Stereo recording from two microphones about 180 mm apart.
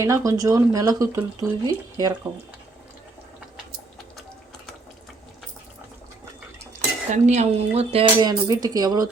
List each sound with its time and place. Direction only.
0.0 s speech: 20° right (ahead or behind)
7.1 s speech: 40° right (ahead or behind); by 9.0 s 20° right (ahead or behind)